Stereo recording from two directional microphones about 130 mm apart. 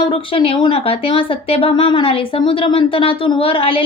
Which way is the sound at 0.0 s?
45° left (ahead or behind).